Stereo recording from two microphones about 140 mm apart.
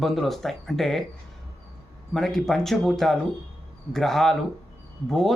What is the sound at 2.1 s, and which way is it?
Speech, 5° left (ahead or behind).